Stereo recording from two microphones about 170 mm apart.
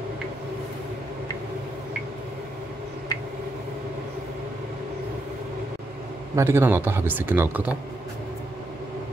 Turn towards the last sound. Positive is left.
turn(degrees=-10)  # may be behind; listen again after turning